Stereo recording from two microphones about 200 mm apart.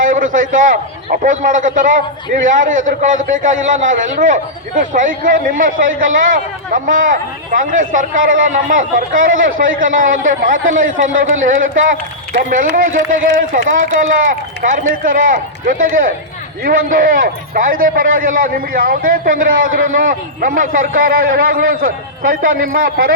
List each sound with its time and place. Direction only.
0.0 s a man's voice: 40° right (ahead or behind)
14.6 s a man's voice: 40° right (ahead or behind)